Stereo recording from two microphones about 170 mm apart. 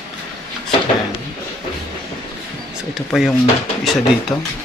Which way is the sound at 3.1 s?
Centre (ahead or behind).